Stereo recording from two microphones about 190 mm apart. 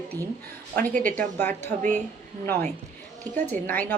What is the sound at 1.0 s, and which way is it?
A woman's voice, 10° left (ahead or behind).